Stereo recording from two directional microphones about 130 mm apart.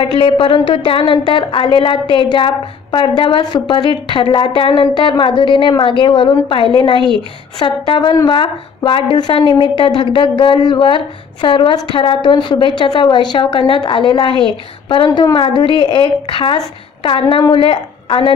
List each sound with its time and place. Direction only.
0.0 s a woman's voice: 45° left (ahead or behind)
15.3 s a woman's voice: 40° left (ahead or behind)